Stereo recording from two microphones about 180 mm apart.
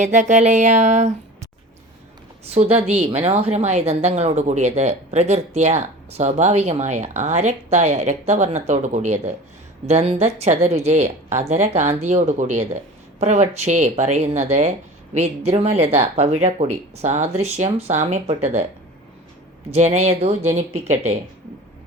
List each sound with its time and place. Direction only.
0.0 s speech: 40° right (ahead or behind)
2.4 s speech: 35° right (ahead or behind)
19.7 s speech: 40° right (ahead or behind)